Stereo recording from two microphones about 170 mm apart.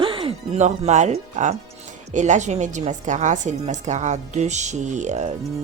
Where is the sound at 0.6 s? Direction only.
45° right (ahead or behind).